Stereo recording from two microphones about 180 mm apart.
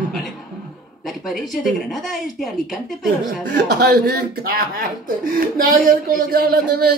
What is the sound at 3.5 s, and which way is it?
Speech, 65° right (ahead or behind).